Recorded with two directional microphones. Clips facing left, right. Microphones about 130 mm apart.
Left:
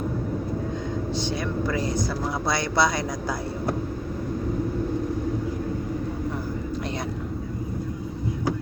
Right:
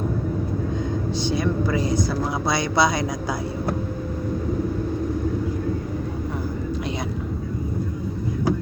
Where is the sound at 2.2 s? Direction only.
20° right (ahead or behind).